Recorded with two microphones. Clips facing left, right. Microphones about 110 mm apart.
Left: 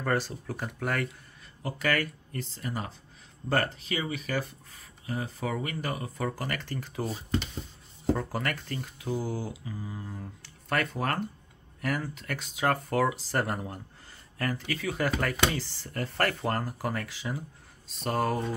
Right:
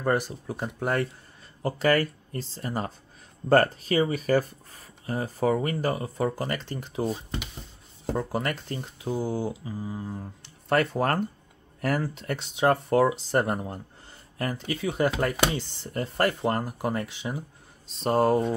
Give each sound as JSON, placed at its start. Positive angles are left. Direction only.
{"t": 0.0, "sound": "speech", "side_deg": -20}